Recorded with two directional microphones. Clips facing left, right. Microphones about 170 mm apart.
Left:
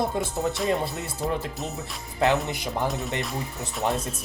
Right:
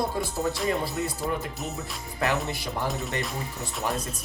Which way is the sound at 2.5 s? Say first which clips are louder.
Left 2 dB; 20° left (ahead or behind).